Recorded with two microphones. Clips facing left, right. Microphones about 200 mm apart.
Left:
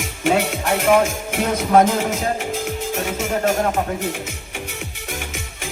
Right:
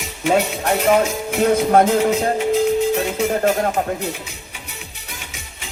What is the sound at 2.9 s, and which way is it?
Music, 45° left (ahead or behind).